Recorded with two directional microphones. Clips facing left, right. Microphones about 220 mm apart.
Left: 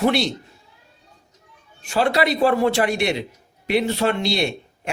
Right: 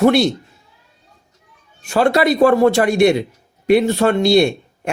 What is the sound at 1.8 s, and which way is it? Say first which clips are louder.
Speech: right 5 dB; 45° right (ahead or behind).